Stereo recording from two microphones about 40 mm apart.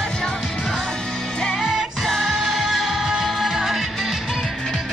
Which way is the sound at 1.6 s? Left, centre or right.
Centre.